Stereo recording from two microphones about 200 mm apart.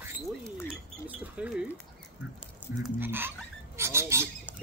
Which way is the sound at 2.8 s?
10° right (ahead or behind).